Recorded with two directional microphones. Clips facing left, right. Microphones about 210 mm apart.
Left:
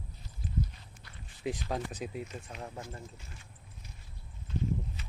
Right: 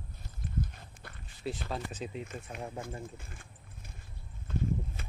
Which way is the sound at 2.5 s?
10° right (ahead or behind).